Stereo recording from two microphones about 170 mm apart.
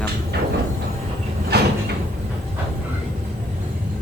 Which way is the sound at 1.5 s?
75° right (ahead or behind).